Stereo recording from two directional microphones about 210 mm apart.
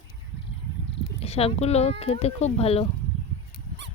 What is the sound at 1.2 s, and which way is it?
Speech, 30° left (ahead or behind).